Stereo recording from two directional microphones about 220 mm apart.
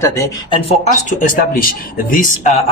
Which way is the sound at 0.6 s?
30° left (ahead or behind).